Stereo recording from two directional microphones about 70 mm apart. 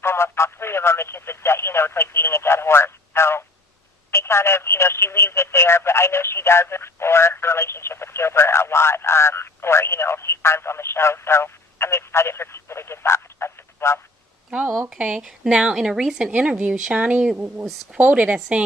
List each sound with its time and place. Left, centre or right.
0.0 s telephone: left
4.1 s speech: left
14.8 s speech: centre